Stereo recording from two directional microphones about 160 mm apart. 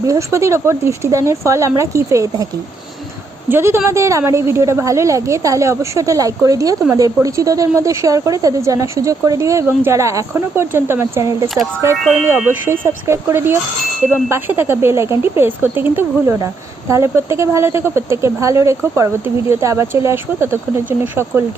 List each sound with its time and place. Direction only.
0.0 s a woman's voice: 20° right (ahead or behind)
3.5 s a woman's voice: 15° right (ahead or behind)
11.4 s speech: centre (ahead or behind)
12.8 s a woman's voice: 15° right (ahead or behind)